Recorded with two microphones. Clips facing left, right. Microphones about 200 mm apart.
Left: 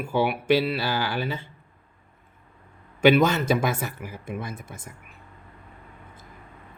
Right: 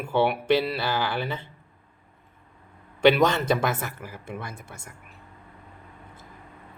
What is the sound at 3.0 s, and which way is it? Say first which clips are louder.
Mantra: left 1 dB; 5° left (ahead or behind).